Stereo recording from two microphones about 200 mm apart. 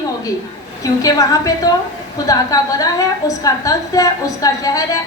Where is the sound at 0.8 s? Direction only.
15° left (ahead or behind).